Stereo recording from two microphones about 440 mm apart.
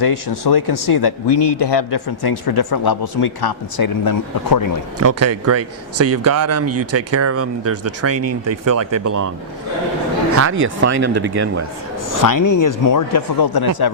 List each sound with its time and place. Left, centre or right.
0.0 s speech: left
4.9 s speech: right
10.3 s speech: right
12.1 s speech: left